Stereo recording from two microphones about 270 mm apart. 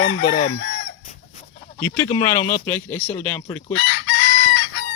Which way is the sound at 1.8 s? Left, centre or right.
Centre.